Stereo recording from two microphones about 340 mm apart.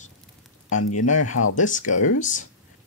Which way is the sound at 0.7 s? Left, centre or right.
Left.